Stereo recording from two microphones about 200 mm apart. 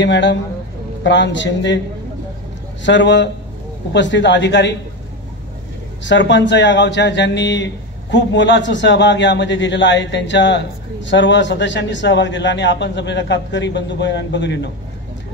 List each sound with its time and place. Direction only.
0.0 s speech: 60° left (ahead or behind)
2.8 s speech: 65° left (ahead or behind)
6.0 s speech: 65° left (ahead or behind)